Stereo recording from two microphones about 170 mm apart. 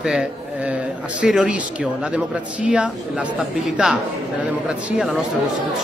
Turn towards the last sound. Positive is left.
turn(degrees=-5)  # may be behind; listen again after turning